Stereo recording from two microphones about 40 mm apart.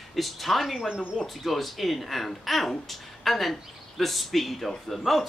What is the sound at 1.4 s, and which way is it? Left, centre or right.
Speech, centre.